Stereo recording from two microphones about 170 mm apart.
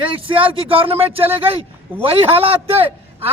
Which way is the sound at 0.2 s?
30° right (ahead or behind).